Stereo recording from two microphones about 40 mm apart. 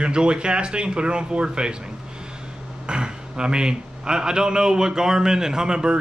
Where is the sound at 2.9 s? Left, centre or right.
Right.